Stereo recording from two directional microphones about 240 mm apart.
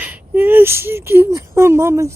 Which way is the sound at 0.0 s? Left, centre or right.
Centre.